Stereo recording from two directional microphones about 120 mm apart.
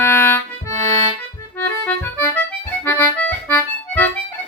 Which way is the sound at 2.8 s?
15° left (ahead or behind).